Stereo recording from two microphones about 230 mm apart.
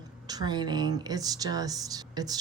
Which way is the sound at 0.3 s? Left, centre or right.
Centre.